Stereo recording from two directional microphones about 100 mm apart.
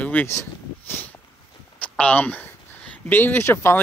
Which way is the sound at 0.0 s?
15° left (ahead or behind).